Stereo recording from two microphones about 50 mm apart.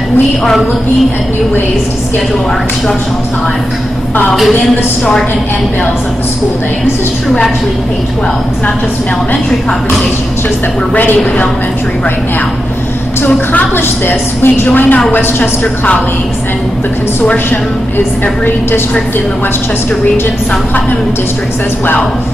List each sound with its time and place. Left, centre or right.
13.2 s a woman's voice: left
14.7 s speech: left
18.2 s speech: left